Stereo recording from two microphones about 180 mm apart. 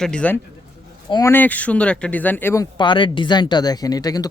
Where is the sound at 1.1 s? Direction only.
25° left (ahead or behind).